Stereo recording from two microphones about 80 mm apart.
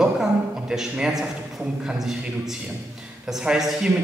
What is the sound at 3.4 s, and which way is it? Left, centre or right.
Speech, centre.